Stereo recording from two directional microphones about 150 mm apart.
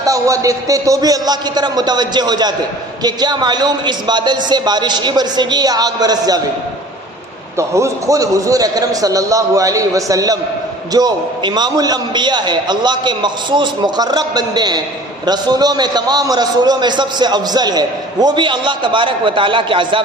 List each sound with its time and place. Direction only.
0.0 s a man's voice: 20° right (ahead or behind)
7.5 s a man's voice: 20° right (ahead or behind)